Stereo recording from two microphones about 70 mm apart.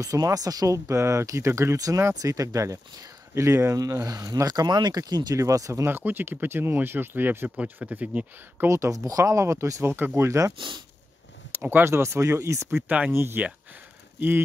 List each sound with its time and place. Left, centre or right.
0.0 s speech: right
5.4 s speech: right
5.9 s speech: right
8.6 s speech: right
9.9 s speech: right
10.2 s speech: right
11.5 s speech: right
12.8 s speech: right
13.1 s speech: right